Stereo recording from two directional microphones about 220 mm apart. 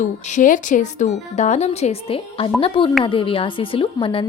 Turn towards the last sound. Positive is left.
turn(degrees=25)  # may be behind; listen again after turning